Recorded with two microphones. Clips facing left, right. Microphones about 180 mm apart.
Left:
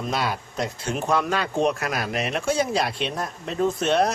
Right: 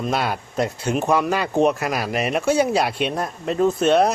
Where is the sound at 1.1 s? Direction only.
10° right (ahead or behind).